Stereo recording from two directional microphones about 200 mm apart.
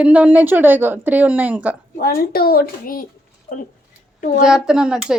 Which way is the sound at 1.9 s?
50° left (ahead or behind).